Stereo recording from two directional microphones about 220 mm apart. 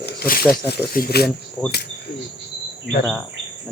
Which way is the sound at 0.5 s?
45° left (ahead or behind).